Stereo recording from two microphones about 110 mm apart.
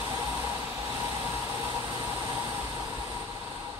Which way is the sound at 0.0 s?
25° right (ahead or behind).